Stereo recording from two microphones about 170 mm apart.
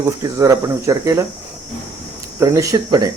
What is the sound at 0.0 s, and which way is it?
Speech, 20° right (ahead or behind).